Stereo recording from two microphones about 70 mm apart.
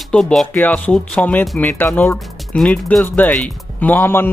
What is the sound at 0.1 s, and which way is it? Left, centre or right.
Speech, centre.